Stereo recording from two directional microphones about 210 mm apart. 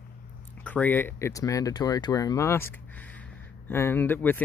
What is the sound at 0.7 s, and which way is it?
Speech, 10° left (ahead or behind).